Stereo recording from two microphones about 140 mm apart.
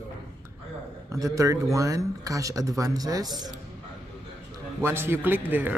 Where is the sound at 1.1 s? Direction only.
25° right (ahead or behind).